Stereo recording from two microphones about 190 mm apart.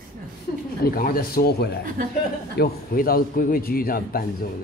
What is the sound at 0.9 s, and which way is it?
A man's voice, 50° left (ahead or behind).